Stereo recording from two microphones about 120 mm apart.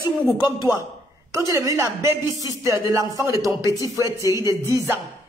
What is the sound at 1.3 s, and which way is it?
A woman's voice, 30° right (ahead or behind).